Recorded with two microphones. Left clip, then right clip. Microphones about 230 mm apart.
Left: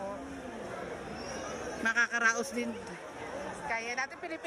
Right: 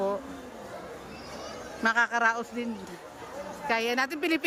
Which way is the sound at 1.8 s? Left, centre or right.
Right.